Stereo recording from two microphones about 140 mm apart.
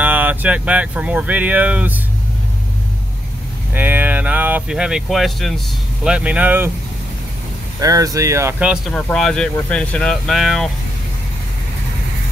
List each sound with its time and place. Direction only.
0.0 s speech: 10° right (ahead or behind)
3.7 s speech: 15° right (ahead or behind)
7.8 s speech: 25° right (ahead or behind)
8.5 s speech: 10° right (ahead or behind)
8.9 s speech: 5° left (ahead or behind)